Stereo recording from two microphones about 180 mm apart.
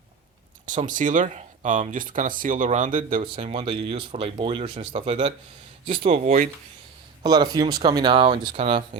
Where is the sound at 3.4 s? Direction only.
35° right (ahead or behind).